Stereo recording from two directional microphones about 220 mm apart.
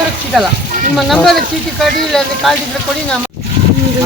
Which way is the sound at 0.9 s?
Centre (ahead or behind).